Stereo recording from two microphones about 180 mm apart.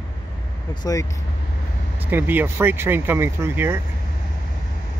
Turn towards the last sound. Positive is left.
turn(degrees=-15)  # may be behind; listen again after turning